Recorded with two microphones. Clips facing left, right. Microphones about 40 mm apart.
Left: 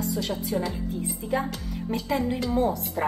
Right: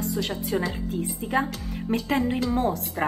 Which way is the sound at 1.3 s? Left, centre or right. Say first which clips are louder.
Right 2 dB; right.